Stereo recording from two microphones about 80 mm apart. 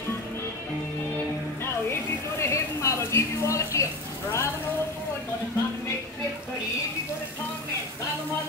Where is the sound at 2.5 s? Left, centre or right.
Left.